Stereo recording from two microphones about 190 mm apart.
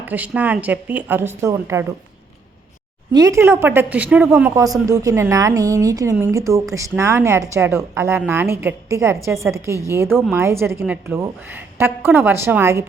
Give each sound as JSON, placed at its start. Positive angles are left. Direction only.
{"t": 0.0, "sound": "speech", "side_deg": -10}
{"t": 3.1, "sound": "speech", "side_deg": -20}